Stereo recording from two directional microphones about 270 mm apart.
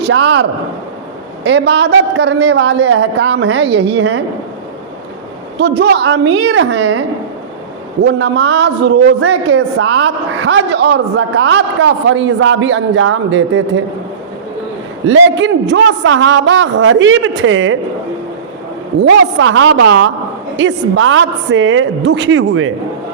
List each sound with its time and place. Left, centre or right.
0.1 s a woman's voice: right
1.5 s a woman's voice: right
5.5 s a woman's voice: right
8.0 s a woman's voice: right
15.0 s a man's voice: right
19.4 s a man's voice: right